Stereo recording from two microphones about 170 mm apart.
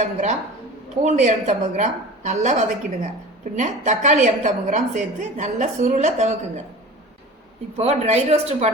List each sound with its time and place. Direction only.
0.0 s a woman's voice: 45° right (ahead or behind)
7.8 s speech: 40° right (ahead or behind)